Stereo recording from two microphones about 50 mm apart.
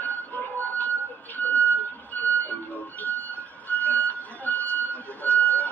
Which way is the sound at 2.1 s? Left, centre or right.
Left.